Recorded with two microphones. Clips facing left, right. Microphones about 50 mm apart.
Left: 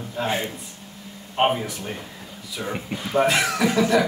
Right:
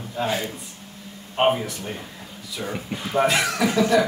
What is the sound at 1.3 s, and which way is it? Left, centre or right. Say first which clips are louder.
Speech: right 1 dB; centre.